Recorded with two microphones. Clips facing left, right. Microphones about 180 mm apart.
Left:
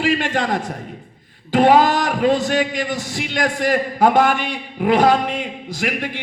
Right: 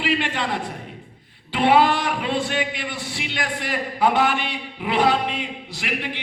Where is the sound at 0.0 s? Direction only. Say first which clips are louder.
Left 4 dB; 45° left (ahead or behind).